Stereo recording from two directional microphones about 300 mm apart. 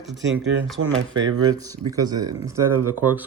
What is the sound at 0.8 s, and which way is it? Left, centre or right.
Speech, right.